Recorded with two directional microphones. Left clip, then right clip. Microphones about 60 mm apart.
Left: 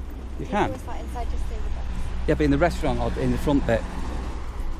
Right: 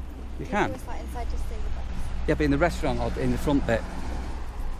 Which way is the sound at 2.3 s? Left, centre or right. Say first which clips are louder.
Left 2 dB; centre.